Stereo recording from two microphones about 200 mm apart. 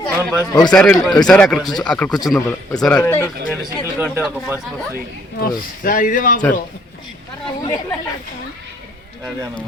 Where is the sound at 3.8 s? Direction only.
10° right (ahead or behind).